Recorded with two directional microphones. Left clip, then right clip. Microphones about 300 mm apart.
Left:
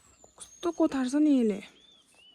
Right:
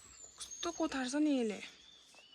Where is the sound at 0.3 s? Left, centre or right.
Centre.